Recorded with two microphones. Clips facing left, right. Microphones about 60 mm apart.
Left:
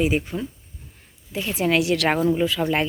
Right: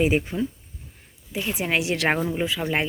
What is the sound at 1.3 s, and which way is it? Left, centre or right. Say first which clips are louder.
Speech: left 4 dB; centre.